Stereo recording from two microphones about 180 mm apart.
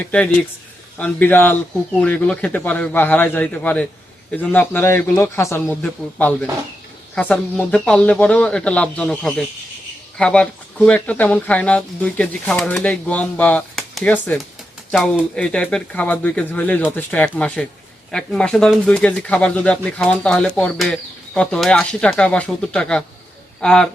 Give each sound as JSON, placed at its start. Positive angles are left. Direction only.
{"t": 0.0, "sound": "speech", "side_deg": 5}